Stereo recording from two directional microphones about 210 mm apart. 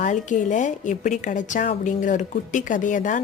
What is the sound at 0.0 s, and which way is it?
A woman's voice, 35° left (ahead or behind).